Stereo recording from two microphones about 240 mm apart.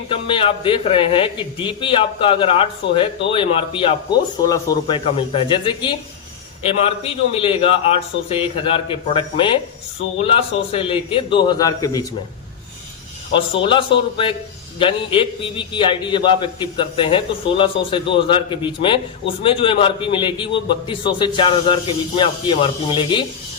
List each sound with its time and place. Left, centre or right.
0.1 s a man's voice: left
13.3 s a man's voice: left